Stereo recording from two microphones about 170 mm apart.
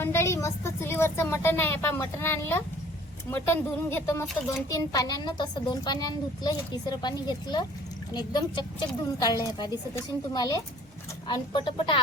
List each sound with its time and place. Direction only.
0.0 s a woman's voice: 15° left (ahead or behind)